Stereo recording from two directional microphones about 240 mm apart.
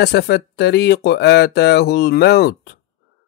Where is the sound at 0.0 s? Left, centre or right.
Left.